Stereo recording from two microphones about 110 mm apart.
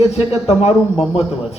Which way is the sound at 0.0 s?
75° left (ahead or behind).